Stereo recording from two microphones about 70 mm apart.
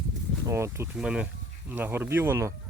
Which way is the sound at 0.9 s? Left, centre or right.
Centre.